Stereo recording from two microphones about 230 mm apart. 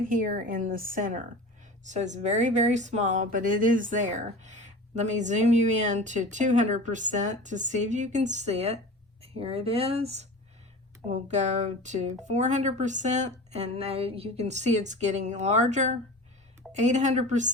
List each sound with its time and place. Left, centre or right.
0.1 s a woman's voice: right